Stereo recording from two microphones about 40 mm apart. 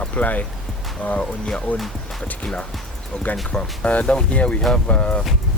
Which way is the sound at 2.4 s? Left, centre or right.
Left.